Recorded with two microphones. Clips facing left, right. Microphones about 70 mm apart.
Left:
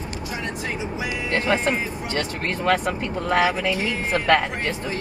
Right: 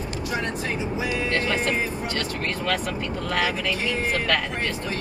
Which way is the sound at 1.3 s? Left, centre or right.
Left.